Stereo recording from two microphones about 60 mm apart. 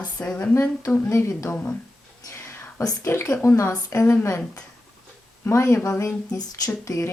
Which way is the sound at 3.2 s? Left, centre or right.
Left.